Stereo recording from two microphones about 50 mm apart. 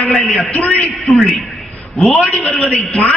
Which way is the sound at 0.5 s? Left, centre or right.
Left.